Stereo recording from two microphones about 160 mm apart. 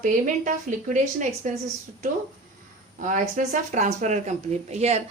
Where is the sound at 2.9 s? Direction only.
55° right (ahead or behind).